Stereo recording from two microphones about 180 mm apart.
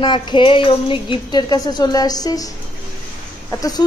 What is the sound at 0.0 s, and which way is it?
A woman's voice, 25° left (ahead or behind).